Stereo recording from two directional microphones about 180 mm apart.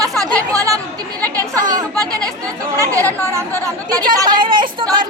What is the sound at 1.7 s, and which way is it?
Speech, 20° right (ahead or behind).